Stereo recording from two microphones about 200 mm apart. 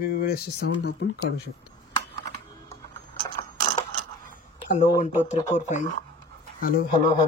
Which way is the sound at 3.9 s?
40° left (ahead or behind).